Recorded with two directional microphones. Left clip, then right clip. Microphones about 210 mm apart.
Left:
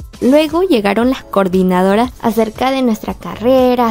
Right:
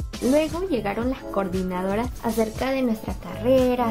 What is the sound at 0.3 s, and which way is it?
Speech, 55° left (ahead or behind).